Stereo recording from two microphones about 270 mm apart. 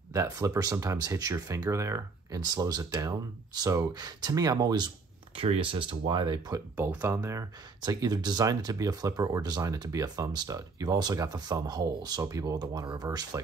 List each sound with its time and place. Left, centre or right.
0.1 s speech: centre